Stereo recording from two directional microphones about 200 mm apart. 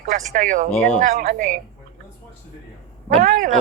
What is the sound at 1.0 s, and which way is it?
Speech, 35° right (ahead or behind).